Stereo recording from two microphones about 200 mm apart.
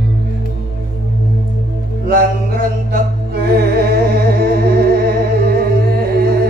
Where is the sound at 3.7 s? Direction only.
50° right (ahead or behind).